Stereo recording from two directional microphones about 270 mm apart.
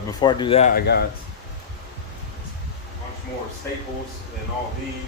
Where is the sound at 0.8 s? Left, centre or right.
Left.